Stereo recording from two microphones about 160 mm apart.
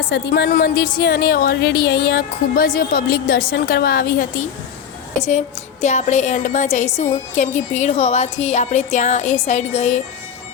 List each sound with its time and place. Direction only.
0.1 s a woman's voice: 90° left
0.9 s speech: 80° left
5.8 s speech: 45° left (ahead or behind)